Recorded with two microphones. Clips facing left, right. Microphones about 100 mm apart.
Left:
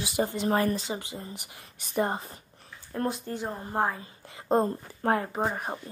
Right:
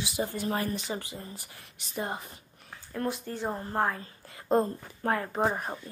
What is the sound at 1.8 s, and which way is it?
Speech, 50° left (ahead or behind).